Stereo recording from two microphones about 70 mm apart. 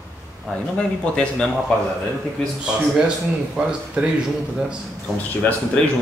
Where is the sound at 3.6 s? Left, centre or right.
Centre.